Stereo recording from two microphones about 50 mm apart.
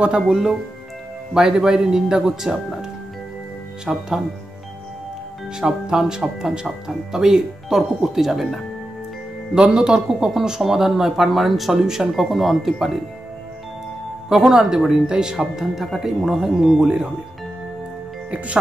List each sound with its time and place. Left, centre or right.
0.3 s speech: centre
5.6 s speech: centre
9.5 s speech: centre
14.3 s speech: centre